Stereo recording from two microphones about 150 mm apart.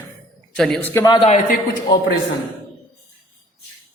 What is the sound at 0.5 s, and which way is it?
Speech, 5° left (ahead or behind).